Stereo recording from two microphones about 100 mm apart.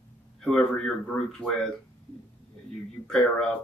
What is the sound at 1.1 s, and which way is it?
Speech, 20° left (ahead or behind).